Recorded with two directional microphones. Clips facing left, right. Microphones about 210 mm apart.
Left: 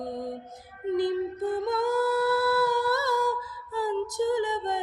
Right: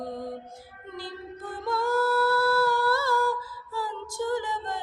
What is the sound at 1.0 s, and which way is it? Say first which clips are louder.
Music: left 11 dB; 20° left (ahead or behind).